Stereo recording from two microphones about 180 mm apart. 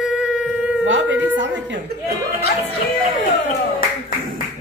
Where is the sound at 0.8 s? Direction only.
90° right.